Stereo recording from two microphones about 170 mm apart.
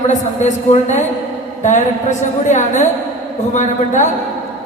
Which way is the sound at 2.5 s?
45° left (ahead or behind).